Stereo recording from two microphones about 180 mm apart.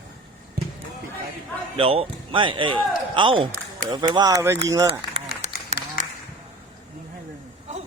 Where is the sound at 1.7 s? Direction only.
30° right (ahead or behind).